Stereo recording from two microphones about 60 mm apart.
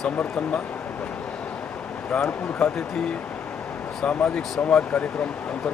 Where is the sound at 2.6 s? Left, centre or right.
Centre.